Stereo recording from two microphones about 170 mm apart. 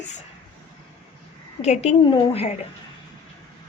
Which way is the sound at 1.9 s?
30° left (ahead or behind).